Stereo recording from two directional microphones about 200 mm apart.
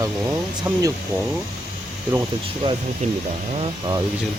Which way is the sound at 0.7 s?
10° right (ahead or behind).